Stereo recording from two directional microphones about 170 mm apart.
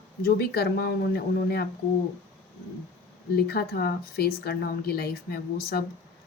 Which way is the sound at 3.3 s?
65° left (ahead or behind).